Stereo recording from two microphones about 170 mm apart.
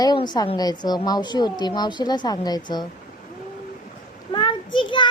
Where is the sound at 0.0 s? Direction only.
25° left (ahead or behind).